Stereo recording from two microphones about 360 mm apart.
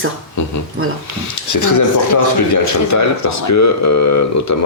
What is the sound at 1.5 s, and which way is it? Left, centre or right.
Speech, left.